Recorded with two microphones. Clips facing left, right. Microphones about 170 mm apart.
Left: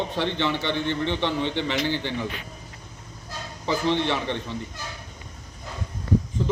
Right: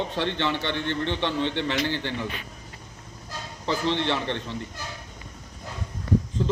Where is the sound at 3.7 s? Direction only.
15° left (ahead or behind).